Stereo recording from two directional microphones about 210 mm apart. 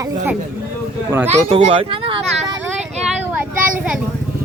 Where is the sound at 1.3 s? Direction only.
30° right (ahead or behind).